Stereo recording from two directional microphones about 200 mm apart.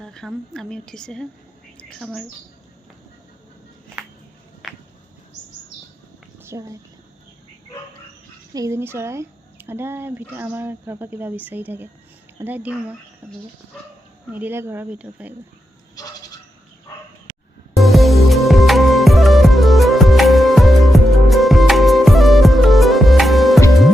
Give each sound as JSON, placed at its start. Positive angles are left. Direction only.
{"t": 0.0, "sound": "speech", "side_deg": 5}
{"t": 4.6, "sound": "a sound", "side_deg": 0}
{"t": 6.4, "sound": "speech", "side_deg": -15}
{"t": 8.5, "sound": "speech", "side_deg": -15}
{"t": 16.0, "sound": "goat", "side_deg": 20}
{"t": 17.7, "sound": "music", "side_deg": 0}